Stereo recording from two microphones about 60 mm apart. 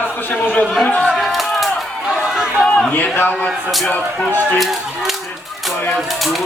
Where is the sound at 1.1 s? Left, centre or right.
Centre.